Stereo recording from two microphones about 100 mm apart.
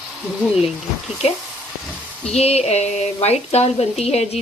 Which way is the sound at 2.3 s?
90° left.